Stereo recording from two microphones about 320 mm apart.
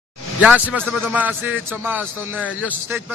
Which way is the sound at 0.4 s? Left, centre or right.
Centre.